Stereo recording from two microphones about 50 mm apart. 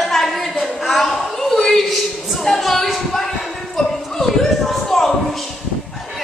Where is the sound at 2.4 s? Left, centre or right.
Centre.